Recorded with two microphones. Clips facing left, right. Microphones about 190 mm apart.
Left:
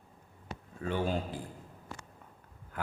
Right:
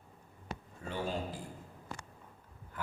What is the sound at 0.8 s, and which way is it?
Speech, 90° left.